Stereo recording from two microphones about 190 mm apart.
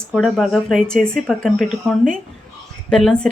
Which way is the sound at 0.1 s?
Centre (ahead or behind).